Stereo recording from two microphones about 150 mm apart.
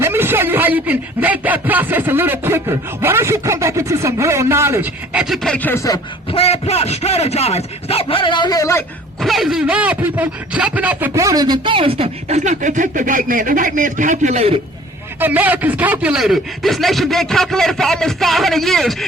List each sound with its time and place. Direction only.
0.0 s a man's voice: 15° right (ahead or behind); by 6.0 s 20° left (ahead or behind)
6.3 s speech: 45° left (ahead or behind); by 8.8 s 20° left (ahead or behind)
9.2 s speech: centre (ahead or behind); by 14.6 s 45° right (ahead or behind)
15.2 s speech: 10° right (ahead or behind)